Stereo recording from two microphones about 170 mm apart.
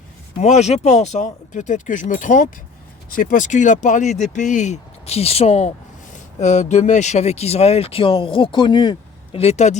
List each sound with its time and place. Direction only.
0.3 s speech: 45° left (ahead or behind)